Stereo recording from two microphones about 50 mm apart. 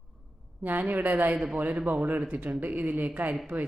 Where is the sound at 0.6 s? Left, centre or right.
Right.